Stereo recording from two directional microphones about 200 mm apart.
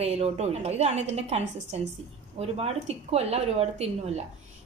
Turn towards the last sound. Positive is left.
turn(degrees=-30)  # may be behind; listen again after turning